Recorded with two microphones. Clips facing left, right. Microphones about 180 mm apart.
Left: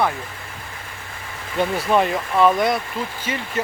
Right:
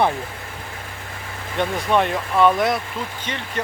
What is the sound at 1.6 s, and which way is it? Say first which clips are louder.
Speech: left 1 dB; 5° left (ahead or behind).